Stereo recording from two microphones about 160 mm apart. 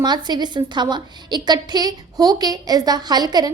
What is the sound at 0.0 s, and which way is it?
A woman's voice, 25° right (ahead or behind).